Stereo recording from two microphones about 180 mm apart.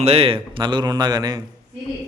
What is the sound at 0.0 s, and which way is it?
A man's voice, 35° right (ahead or behind).